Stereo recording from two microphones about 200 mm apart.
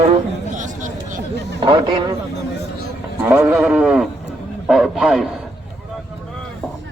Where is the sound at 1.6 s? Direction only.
25° right (ahead or behind).